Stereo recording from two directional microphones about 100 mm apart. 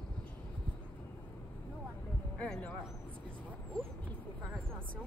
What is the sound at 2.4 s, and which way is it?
Speech, 15° left (ahead or behind).